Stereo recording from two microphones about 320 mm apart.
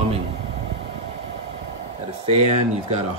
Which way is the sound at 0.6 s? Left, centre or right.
Right.